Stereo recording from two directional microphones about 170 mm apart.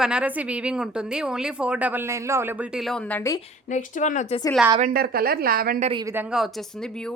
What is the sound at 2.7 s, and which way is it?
Speech, centre (ahead or behind).